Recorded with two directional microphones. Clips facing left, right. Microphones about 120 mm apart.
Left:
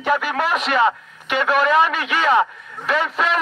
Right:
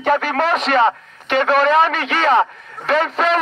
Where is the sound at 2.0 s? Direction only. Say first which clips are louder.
Right 2 dB; 40° right (ahead or behind).